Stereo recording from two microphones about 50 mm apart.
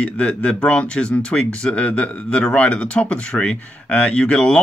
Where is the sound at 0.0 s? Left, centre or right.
Left.